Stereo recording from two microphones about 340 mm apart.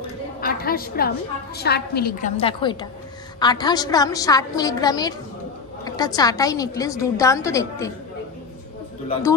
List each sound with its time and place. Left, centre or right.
0.4 s a woman's voice: left; by 7.9 s centre